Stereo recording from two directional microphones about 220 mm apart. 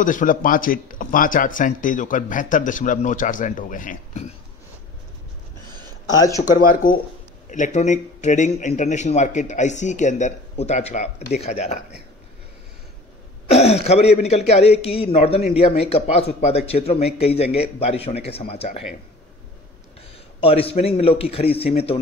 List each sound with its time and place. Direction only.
0.0 s speech: 35° left (ahead or behind)
6.1 s speech: 15° left (ahead or behind)
6.5 s a man's voice: 40° left (ahead or behind)
13.5 s a man's voice: 30° left (ahead or behind)
20.3 s a man's voice: 25° left (ahead or behind)